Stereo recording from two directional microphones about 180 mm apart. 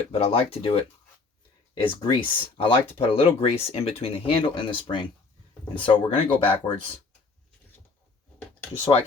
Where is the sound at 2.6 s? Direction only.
30° left (ahead or behind).